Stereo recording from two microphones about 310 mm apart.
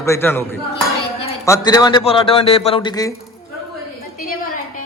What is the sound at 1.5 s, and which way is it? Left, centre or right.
A man's voice, centre.